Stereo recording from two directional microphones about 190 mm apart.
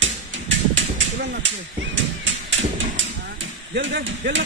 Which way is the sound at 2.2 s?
85° right.